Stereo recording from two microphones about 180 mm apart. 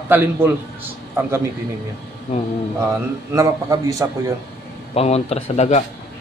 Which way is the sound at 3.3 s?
20° right (ahead or behind).